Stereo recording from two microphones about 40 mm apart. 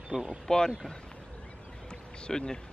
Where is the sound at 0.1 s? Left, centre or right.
Centre.